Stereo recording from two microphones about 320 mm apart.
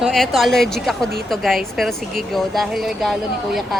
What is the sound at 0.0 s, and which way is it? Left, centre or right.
Speech, centre.